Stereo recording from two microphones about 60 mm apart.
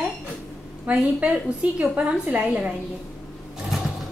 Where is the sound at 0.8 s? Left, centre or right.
Right.